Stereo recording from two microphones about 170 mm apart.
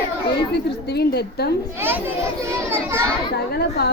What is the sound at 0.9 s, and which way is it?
Speech, 70° left (ahead or behind).